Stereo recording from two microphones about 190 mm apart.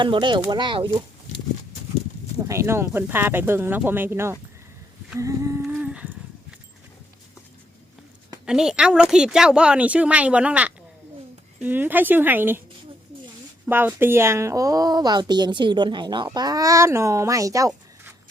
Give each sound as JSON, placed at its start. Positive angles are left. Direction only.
{"t": 0.0, "sound": "speech", "side_deg": -25}
{"t": 2.5, "sound": "a woman's voice", "side_deg": -15}
{"t": 5.6, "sound": "humming", "side_deg": -5}
{"t": 8.4, "sound": "a woman's voice", "side_deg": -5}
{"t": 13.7, "sound": "a woman's voice", "side_deg": -10}